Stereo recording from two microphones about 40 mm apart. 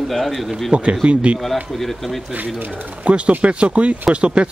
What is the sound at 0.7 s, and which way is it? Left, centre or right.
Speech, right.